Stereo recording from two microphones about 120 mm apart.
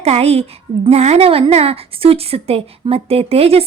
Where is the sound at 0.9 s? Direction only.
60° right (ahead or behind).